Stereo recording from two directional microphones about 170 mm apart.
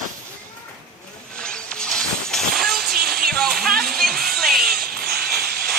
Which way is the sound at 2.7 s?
60° right (ahead or behind).